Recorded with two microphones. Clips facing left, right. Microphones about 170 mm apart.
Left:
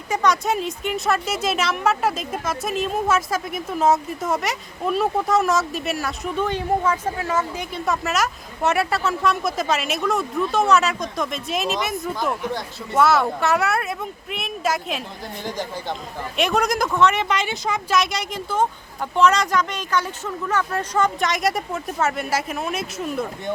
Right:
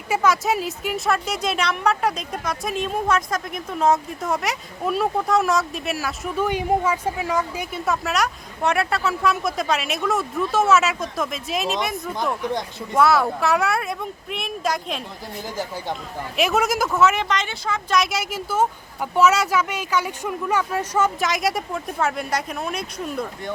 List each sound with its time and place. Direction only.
0.1 s speech: 5° right (ahead or behind)
7.9 s speech: centre (ahead or behind)
17.2 s speech: 10° left (ahead or behind)
17.9 s speech: centre (ahead or behind)